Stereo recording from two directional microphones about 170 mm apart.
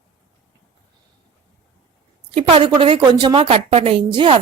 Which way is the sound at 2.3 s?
35° right (ahead or behind).